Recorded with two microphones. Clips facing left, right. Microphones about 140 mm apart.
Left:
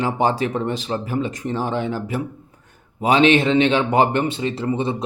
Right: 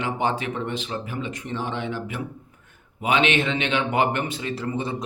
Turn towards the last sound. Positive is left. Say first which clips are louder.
# left 6 dB
turn(degrees=25)  # may be behind; listen again after turning